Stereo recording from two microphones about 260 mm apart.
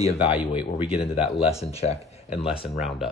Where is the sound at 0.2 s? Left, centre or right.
Centre.